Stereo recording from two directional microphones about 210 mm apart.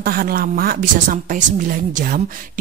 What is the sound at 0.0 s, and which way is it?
A woman's voice, 45° right (ahead or behind).